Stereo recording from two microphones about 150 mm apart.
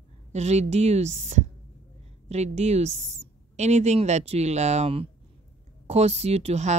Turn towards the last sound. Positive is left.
turn(degrees=-50)  # may be behind; listen again after turning